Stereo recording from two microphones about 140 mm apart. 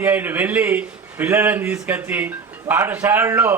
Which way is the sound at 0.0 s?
15° right (ahead or behind).